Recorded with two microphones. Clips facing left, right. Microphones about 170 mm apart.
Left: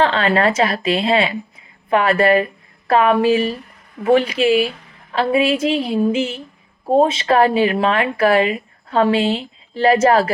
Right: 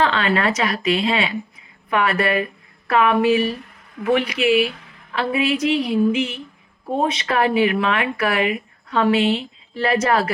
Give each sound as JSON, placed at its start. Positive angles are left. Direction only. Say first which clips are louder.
{"t": 0.0, "sound": "a woman's voice", "louder": "left 3 dB", "side_deg": 30}